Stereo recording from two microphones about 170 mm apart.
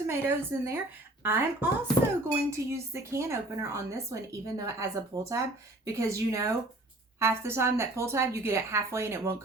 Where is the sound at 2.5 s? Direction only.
15° right (ahead or behind).